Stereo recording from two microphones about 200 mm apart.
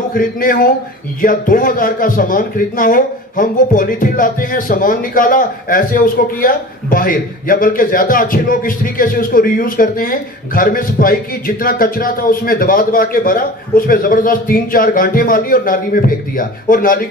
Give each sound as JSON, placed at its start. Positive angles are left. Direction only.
{"t": 0.1, "sound": "speech", "side_deg": 45}